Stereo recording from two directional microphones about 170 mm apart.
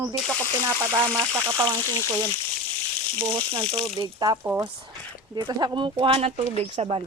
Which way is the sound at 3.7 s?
30° right (ahead or behind).